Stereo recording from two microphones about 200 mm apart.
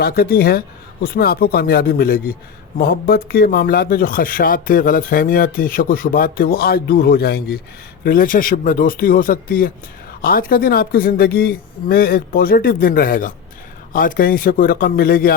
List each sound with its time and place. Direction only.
0.0 s speech: 50° left (ahead or behind)